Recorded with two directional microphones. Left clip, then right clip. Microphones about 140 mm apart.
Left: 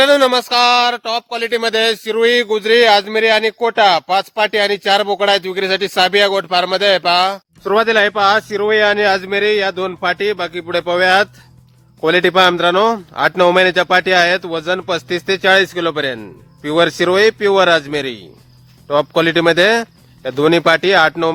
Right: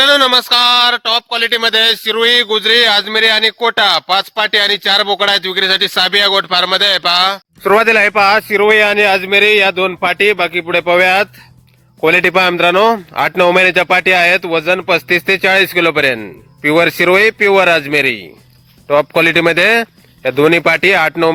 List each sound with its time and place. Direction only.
0.0 s speech: centre (ahead or behind)
7.6 s a man's voice: 30° right (ahead or behind)